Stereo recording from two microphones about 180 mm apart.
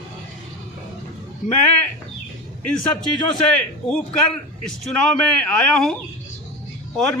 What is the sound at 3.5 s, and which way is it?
A man's voice, 5° left (ahead or behind).